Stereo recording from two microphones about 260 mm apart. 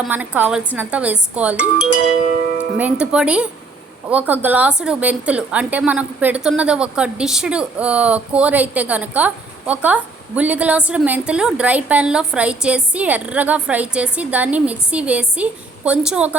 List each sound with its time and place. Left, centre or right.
0.0 s a woman's voice: centre
2.2 s speech: right
2.7 s a woman's voice: centre